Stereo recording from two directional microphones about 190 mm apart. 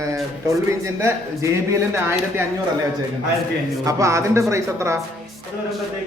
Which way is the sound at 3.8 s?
15° right (ahead or behind).